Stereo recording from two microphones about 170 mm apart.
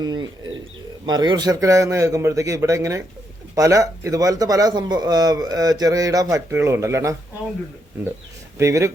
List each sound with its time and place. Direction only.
0.0 s speech: 25° right (ahead or behind)
8.5 s speech: 15° right (ahead or behind)